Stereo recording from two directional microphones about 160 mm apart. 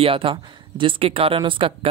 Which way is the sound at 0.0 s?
35° right (ahead or behind).